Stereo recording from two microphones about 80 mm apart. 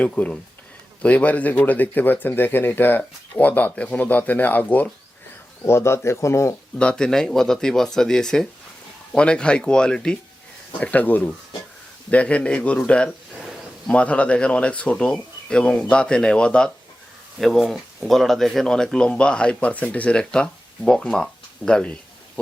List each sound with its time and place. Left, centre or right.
0.0 s speech: centre
5.6 s speech: left
6.7 s speech: centre
17.3 s speech: centre